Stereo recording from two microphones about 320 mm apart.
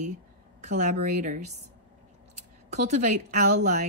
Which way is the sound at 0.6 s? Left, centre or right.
Right.